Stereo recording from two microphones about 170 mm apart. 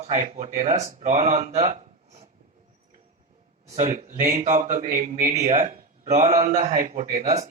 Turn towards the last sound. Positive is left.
turn(degrees=-45)  # may be behind; listen again after turning